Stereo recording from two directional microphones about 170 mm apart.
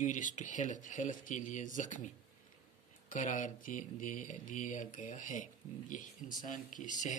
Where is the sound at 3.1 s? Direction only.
50° left (ahead or behind).